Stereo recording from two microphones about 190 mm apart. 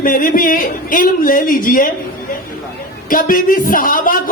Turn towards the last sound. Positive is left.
turn(degrees=45)  # may be behind; listen again after turning